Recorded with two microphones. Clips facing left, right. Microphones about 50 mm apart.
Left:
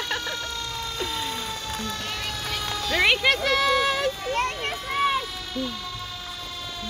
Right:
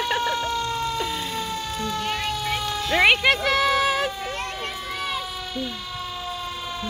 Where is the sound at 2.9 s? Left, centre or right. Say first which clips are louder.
Right 3 dB; centre.